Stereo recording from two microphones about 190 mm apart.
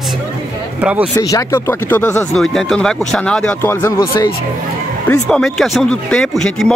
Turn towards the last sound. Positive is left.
turn(degrees=5)  # may be behind; listen again after turning